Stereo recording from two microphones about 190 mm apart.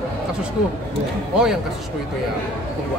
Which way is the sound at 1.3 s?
5° right (ahead or behind).